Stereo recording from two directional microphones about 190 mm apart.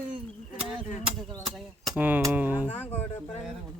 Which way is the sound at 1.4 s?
Centre (ahead or behind).